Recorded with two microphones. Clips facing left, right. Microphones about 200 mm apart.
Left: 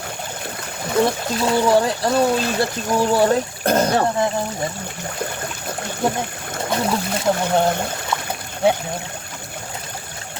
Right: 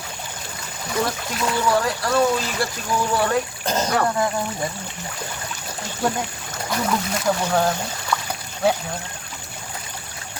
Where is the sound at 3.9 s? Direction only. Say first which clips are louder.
Left 2 dB; 25° left (ahead or behind).